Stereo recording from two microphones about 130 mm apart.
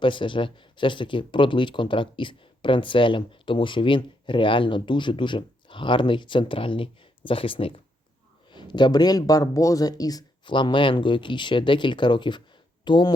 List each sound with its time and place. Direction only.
0.0 s speech: 40° left (ahead or behind)